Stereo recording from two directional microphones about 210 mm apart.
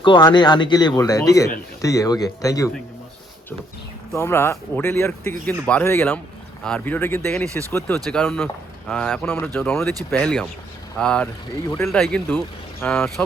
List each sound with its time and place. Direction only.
0.0 s speech: 25° left (ahead or behind)
4.1 s speech: 10° left (ahead or behind)